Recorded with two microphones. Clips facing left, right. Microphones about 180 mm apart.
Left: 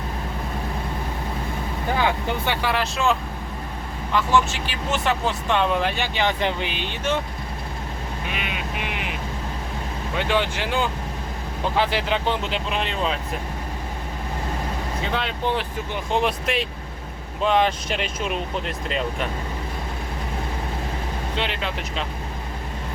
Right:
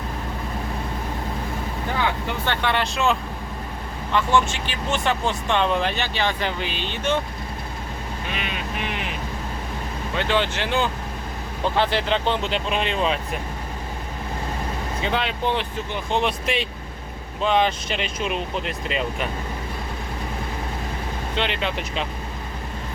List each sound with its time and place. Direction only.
2.4 s speech: 10° left (ahead or behind)
6.1 s speech: 20° left (ahead or behind)
10.2 s speech: 10° left (ahead or behind)
15.0 s speech: centre (ahead or behind)
21.3 s speech: 5° left (ahead or behind)